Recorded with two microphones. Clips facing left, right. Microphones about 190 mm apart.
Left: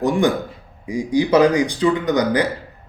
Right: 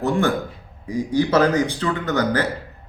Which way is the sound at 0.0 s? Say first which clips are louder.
Left 2 dB; 15° left (ahead or behind).